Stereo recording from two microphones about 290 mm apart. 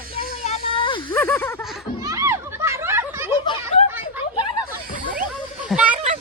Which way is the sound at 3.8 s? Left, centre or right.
Centre.